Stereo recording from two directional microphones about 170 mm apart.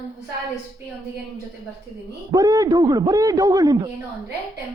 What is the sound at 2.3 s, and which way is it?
A man's voice, 20° right (ahead or behind).